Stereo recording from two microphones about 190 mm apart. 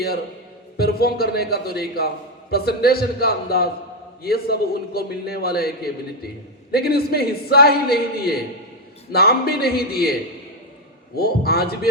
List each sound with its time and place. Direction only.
0.8 s a man's voice: 55° left (ahead or behind)
11.2 s a man's voice: 55° left (ahead or behind)